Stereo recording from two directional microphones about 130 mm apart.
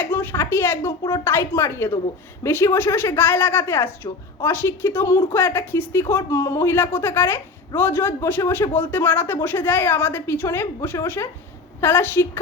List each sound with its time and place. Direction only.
0.0 s speech: 15° left (ahead or behind)